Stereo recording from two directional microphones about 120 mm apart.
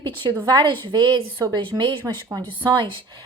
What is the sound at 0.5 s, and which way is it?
A woman's voice, 40° right (ahead or behind).